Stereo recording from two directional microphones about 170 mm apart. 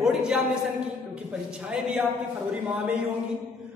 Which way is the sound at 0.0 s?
5° right (ahead or behind).